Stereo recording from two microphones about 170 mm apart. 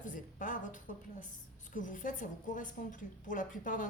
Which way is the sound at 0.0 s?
50° left (ahead or behind).